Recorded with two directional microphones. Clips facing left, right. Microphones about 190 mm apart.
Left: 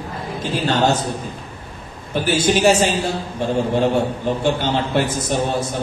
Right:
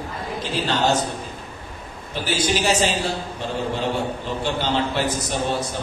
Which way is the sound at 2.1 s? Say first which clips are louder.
Left 5 dB; 50° left (ahead or behind).